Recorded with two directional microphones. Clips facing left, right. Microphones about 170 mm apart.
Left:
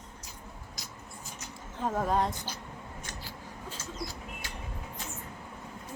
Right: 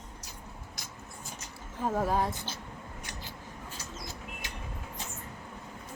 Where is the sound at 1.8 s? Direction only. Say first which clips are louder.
Even; 5° right (ahead or behind).